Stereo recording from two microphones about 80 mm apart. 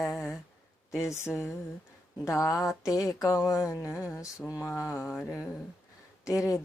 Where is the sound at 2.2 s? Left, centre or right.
Left.